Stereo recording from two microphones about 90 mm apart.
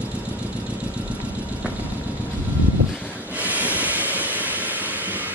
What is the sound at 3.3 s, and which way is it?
Vehicle, 20° right (ahead or behind).